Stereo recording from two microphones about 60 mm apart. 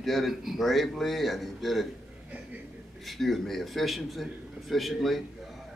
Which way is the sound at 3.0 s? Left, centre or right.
Centre.